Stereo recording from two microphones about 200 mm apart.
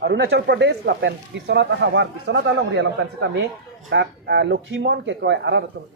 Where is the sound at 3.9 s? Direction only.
60° right (ahead or behind).